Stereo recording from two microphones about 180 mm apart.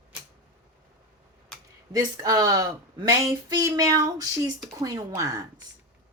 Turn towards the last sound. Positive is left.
turn(degrees=-20)  # may be behind; listen again after turning